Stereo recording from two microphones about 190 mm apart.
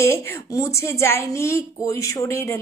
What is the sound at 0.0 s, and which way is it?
Speech, 15° left (ahead or behind).